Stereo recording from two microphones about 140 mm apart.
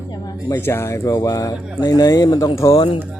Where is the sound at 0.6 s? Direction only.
20° left (ahead or behind).